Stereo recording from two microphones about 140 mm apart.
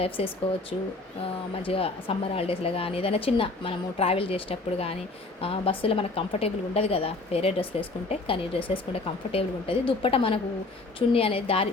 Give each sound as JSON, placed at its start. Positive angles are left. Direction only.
{"t": 0.2, "sound": "a woman's voice", "side_deg": 45}
{"t": 1.6, "sound": "a woman's voice", "side_deg": 40}